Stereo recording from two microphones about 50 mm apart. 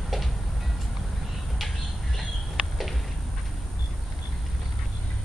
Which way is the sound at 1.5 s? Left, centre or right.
Centre.